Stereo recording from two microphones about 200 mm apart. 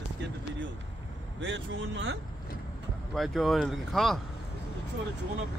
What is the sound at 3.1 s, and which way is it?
Speech, centre (ahead or behind).